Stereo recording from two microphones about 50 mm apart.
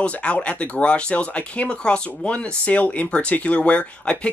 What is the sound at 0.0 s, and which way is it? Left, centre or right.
Speech, left.